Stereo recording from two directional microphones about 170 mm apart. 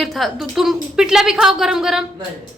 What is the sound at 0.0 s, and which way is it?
A woman's voice, centre (ahead or behind).